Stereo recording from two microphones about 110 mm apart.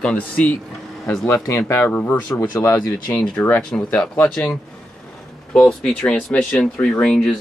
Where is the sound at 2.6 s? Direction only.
30° left (ahead or behind).